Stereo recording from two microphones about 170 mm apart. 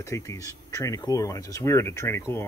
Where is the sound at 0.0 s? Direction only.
20° left (ahead or behind).